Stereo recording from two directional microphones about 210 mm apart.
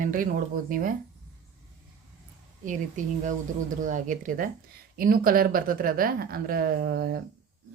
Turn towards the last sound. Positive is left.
turn(degrees=-45)  # may be behind; listen again after turning